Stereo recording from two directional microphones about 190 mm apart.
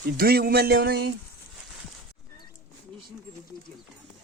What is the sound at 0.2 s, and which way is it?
Speech, 50° right (ahead or behind).